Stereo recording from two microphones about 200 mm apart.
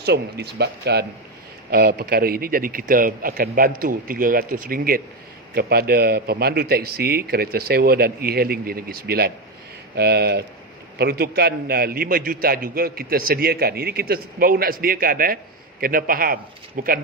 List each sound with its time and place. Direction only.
0.0 s a man's voice: 55° right (ahead or behind)